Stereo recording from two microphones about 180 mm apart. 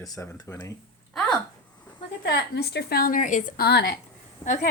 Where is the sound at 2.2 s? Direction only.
65° left (ahead or behind).